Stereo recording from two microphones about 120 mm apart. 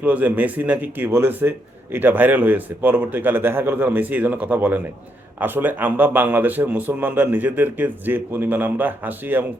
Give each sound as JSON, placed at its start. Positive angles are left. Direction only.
{"t": 0.0, "sound": "speech", "side_deg": -15}